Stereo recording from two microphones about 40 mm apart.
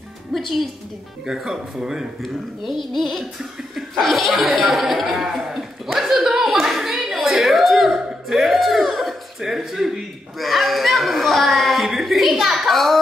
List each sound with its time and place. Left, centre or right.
0.3 s a woman's voice: centre
1.2 s speech: centre
2.2 s speech: centre
6.2 s clapping: centre
7.0 s a sound: centre
12.6 s child singing: centre